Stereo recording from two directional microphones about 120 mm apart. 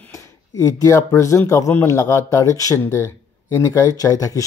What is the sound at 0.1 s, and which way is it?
Speech, 25° left (ahead or behind).